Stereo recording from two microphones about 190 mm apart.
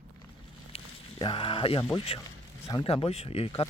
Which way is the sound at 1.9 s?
30° left (ahead or behind).